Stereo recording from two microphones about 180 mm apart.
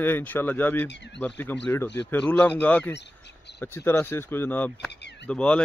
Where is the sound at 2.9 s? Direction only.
70° left (ahead or behind).